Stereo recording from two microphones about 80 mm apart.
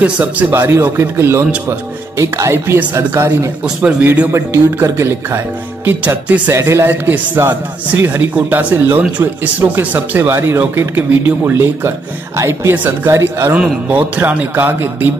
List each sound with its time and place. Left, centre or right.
0.0 s a man's voice: centre
0.5 s speech: right
2.8 s a man's voice: right
4.3 s speech: right
5.9 s a man's voice: centre
6.5 s a man's voice: right
13.6 s a man's voice: centre